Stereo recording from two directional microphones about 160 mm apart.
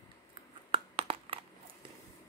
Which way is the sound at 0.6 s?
35° right (ahead or behind).